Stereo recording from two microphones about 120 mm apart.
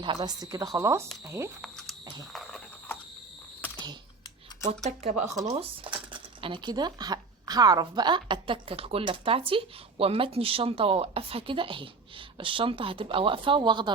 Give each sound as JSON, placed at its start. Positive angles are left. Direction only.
{"t": 0.0, "sound": "speech", "side_deg": -35}
{"t": 1.6, "sound": "a sound", "side_deg": 5}
{"t": 2.3, "sound": "mechanisms", "side_deg": 0}
{"t": 4.8, "sound": "speech", "side_deg": -65}
{"t": 5.3, "sound": "speech", "side_deg": -30}
{"t": 5.5, "sound": "speech", "side_deg": -45}